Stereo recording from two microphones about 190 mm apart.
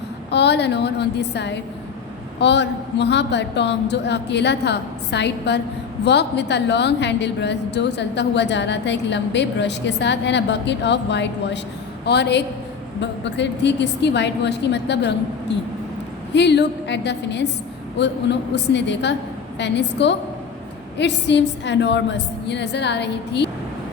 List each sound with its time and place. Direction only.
0.3 s a woman's voice: 65° left (ahead or behind)